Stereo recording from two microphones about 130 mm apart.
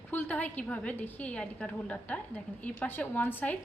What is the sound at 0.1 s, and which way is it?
A woman's voice, 15° left (ahead or behind).